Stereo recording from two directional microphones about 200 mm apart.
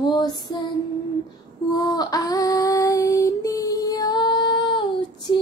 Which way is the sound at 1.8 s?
20° left (ahead or behind).